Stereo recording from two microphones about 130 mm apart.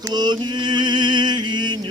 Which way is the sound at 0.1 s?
35° right (ahead or behind).